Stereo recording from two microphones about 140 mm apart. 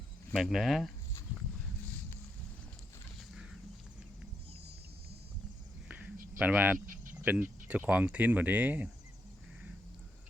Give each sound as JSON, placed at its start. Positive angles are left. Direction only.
{"t": 0.3, "sound": "speech", "side_deg": 0}
{"t": 6.4, "sound": "speech", "side_deg": -10}
{"t": 6.7, "sound": "cricket", "side_deg": -70}
{"t": 7.3, "sound": "speech", "side_deg": -10}